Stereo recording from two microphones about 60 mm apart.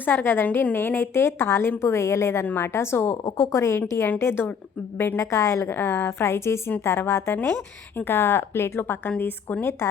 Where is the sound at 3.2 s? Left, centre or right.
Left.